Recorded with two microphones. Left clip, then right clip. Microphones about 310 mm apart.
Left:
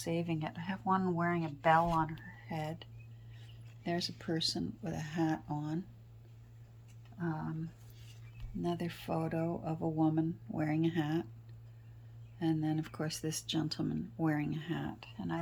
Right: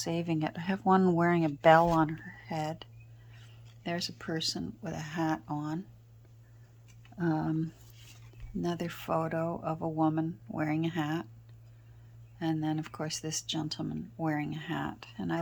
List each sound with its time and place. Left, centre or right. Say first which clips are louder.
0.0 s speech: right 4 dB; centre
7.2 s speech: right 9 dB; right
12.4 s speech: right 2 dB; centre